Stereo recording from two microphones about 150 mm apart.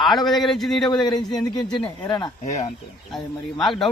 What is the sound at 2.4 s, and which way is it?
Speech, 50° left (ahead or behind).